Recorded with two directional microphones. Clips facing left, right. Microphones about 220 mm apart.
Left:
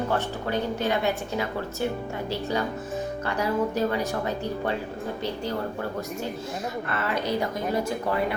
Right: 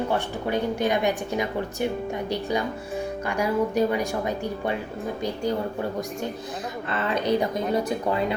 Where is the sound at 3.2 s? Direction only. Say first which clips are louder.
Right 2 dB; 15° right (ahead or behind).